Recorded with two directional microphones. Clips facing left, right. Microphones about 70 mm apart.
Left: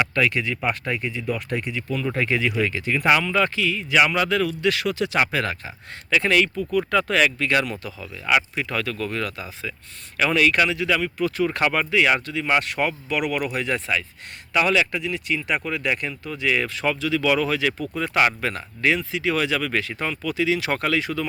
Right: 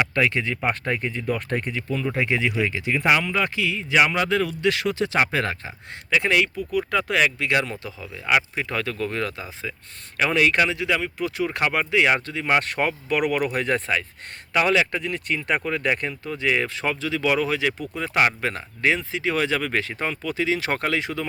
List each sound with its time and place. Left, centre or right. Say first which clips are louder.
0.0 s speech: even; right
2.1 s speech: left 1 dB; right
6.1 s speech: left 1 dB; centre